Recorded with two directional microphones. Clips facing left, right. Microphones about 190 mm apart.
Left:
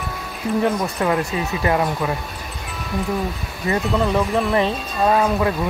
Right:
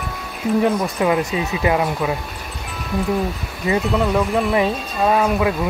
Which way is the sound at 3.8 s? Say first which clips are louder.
Left 1 dB; centre (ahead or behind).